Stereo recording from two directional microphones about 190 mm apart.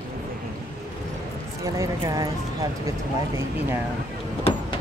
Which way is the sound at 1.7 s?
15° right (ahead or behind).